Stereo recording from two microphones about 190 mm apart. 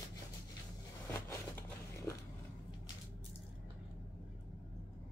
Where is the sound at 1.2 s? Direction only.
15° left (ahead or behind).